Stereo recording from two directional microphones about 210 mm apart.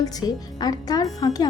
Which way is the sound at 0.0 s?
20° left (ahead or behind).